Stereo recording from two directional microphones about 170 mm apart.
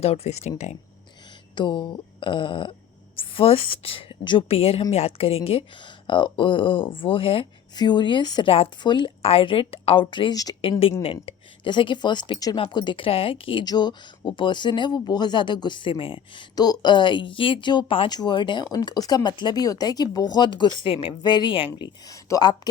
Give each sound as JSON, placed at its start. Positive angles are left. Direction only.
{"t": 0.0, "sound": "speech", "side_deg": 35}
{"t": 1.5, "sound": "speech", "side_deg": 25}